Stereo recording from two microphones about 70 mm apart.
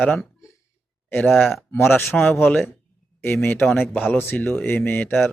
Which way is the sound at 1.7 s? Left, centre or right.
Left.